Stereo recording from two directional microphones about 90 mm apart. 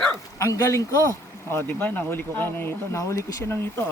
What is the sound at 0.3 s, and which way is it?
Speech, 35° left (ahead or behind).